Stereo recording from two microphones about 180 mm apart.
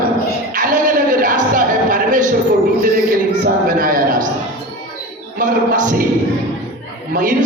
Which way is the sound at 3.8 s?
50° right (ahead or behind).